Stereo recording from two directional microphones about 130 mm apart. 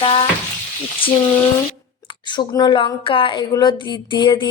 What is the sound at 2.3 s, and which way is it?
Speech, 35° left (ahead or behind).